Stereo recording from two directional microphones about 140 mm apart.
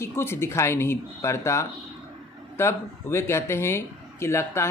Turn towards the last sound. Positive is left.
turn(degrees=20)  # may be behind; listen again after turning